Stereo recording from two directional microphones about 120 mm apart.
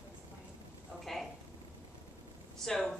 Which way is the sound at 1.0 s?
Centre (ahead or behind).